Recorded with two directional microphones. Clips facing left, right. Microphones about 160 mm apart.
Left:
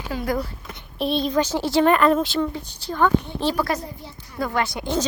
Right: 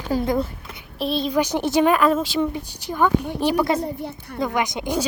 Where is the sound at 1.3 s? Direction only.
15° right (ahead or behind).